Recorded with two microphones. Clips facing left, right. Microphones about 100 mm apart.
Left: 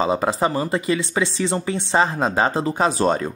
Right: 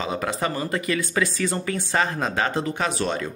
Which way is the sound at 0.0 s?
30° left (ahead or behind).